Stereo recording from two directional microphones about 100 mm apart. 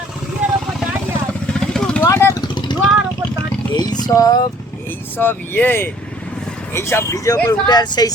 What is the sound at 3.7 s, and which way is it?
Vehicle, 40° left (ahead or behind).